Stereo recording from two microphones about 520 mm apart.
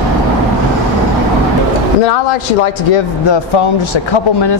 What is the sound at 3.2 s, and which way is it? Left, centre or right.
Speech, left.